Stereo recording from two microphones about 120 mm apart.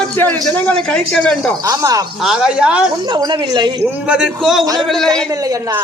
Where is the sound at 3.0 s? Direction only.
40° right (ahead or behind).